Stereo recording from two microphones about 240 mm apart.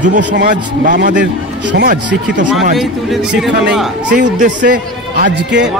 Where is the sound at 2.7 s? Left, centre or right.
Centre.